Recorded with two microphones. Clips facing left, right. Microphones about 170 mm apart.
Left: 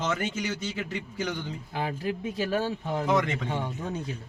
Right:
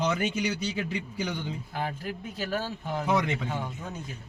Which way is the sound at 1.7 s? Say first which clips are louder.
Left 5 dB; 25° left (ahead or behind).